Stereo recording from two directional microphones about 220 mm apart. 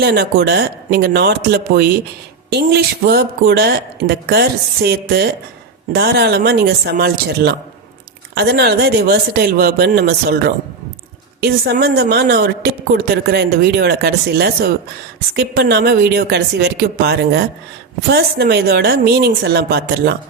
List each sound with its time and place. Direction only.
0.0 s speech: 45° right (ahead or behind)